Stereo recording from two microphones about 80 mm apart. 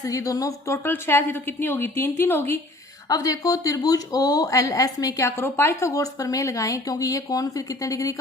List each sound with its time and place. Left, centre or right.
0.0 s speech: left
0.7 s a woman's voice: left
3.1 s speech: left
5.4 s speech: left
5.9 s speech: left